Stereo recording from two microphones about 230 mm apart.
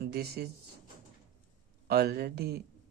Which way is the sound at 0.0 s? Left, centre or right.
Right.